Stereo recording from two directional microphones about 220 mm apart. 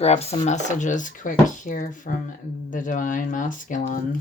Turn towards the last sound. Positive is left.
turn(degrees=40)  # may be behind; listen again after turning